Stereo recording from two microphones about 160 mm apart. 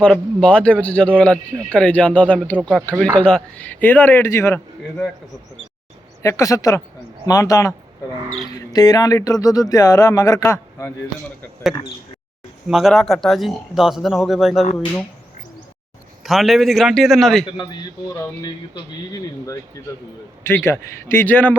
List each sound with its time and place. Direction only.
0.0 s speech: 5° left (ahead or behind)
6.2 s speech: 20° left (ahead or behind)
8.7 s speech: 25° left (ahead or behind)
12.6 s speech: centre (ahead or behind)
16.2 s speech: centre (ahead or behind)
18.1 s speech: 25° left (ahead or behind)